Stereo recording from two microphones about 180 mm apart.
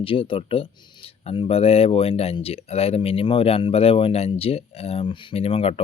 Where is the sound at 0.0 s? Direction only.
30° left (ahead or behind).